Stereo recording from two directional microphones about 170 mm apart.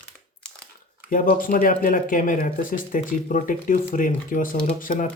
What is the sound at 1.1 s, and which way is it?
Speech, 55° left (ahead or behind).